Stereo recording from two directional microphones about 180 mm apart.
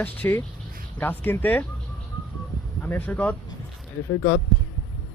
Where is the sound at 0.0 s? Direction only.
10° left (ahead or behind).